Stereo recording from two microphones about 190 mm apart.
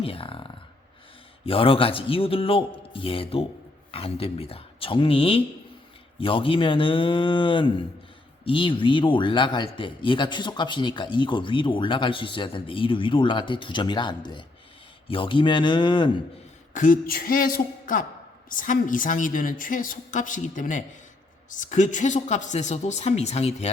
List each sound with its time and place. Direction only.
0.0 s a sound: 30° left (ahead or behind)
1.5 s speech: 30° left (ahead or behind)
16.7 s a woman's voice: 45° left (ahead or behind)